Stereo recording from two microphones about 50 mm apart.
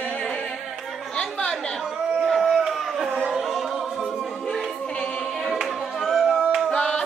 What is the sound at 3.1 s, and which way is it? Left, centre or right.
A capella, centre.